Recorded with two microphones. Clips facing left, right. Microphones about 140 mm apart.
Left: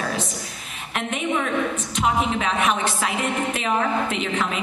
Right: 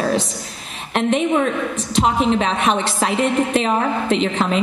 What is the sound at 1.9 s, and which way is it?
A woman's voice, 30° right (ahead or behind).